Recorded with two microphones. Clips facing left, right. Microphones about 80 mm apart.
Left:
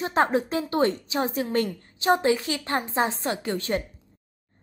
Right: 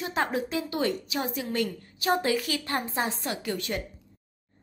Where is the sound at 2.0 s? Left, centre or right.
Left.